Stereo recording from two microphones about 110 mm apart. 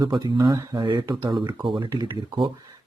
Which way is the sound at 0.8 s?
45° right (ahead or behind).